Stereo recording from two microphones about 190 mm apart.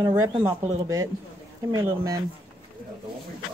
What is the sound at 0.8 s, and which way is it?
Speech, 15° right (ahead or behind).